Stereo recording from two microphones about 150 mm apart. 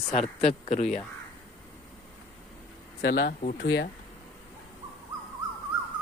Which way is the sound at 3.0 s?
90° left.